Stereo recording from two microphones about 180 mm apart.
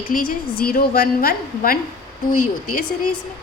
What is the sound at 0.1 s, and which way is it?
A woman's voice, 50° left (ahead or behind).